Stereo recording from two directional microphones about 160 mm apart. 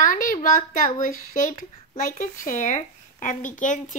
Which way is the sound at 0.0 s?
55° left (ahead or behind).